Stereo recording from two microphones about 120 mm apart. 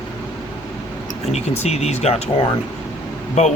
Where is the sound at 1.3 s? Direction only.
65° left (ahead or behind).